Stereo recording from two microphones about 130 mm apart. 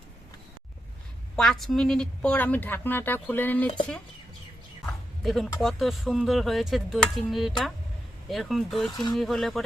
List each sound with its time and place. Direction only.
1.4 s a woman's voice: 5° left (ahead or behind)
5.2 s speech: centre (ahead or behind)
8.9 s speech: 35° left (ahead or behind)
9.1 s speech: centre (ahead or behind)